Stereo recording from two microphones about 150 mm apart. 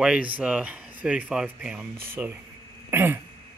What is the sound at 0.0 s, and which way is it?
Speech, 5° right (ahead or behind).